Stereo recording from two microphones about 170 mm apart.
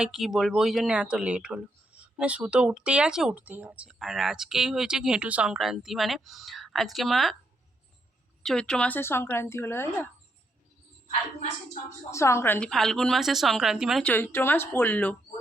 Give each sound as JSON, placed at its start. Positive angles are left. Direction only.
{"t": 0.0, "sound": "speech", "side_deg": 0}
{"t": 8.4, "sound": "speech", "side_deg": 5}
{"t": 11.3, "sound": "speech", "side_deg": 40}
{"t": 12.1, "sound": "speech", "side_deg": 15}
{"t": 14.1, "sound": "speech", "side_deg": 10}